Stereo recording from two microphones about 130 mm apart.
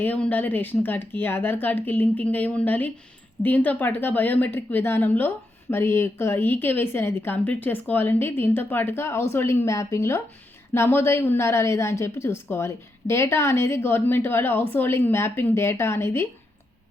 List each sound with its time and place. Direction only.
0.0 s a woman's voice: 15° left (ahead or behind)